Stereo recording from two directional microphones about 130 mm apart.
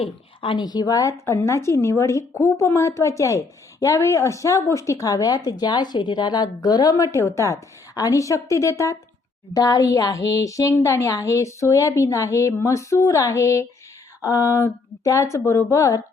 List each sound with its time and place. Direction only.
0.0 s a woman's voice: 40° left (ahead or behind); by 16.0 s 25° left (ahead or behind)